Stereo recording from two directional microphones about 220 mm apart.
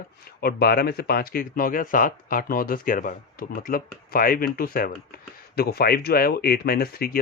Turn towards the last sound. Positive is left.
turn(degrees=45)  # may be behind; listen again after turning